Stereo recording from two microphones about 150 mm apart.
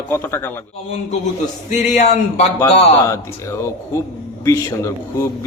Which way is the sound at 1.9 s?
50° left (ahead or behind).